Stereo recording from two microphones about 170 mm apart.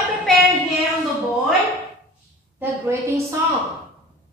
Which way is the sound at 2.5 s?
15° right (ahead or behind).